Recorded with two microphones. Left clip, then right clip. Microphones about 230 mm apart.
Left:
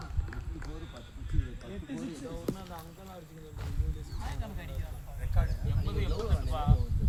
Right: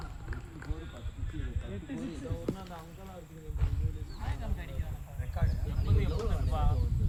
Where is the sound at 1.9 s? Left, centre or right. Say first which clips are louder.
Even; left.